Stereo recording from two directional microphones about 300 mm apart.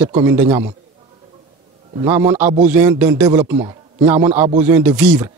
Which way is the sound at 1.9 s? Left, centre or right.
Centre.